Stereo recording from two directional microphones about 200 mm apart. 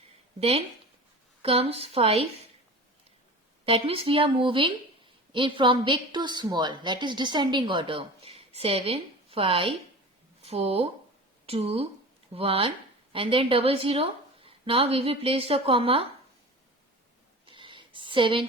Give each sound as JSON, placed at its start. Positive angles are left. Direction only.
{"t": 0.3, "sound": "a woman's voice", "side_deg": -30}
{"t": 3.7, "sound": "a woman's voice", "side_deg": -30}
{"t": 17.4, "sound": "a sound", "side_deg": -25}